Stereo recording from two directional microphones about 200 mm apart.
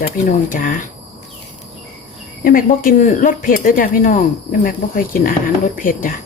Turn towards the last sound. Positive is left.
turn(degrees=40)  # may be behind; listen again after turning